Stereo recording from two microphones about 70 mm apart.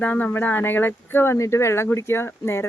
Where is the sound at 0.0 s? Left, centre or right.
Left.